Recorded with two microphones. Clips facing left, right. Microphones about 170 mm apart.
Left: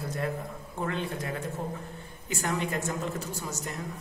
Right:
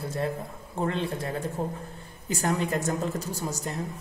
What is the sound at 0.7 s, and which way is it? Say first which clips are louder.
Mantra: right 4 dB; 30° right (ahead or behind).